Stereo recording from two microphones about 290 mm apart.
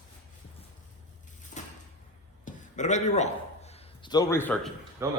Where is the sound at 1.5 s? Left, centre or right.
Left; by 4.7 s centre.